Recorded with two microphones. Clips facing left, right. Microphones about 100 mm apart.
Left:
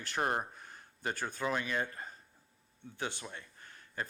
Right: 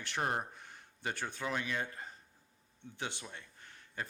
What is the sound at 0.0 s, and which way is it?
A man's voice, 45° left (ahead or behind).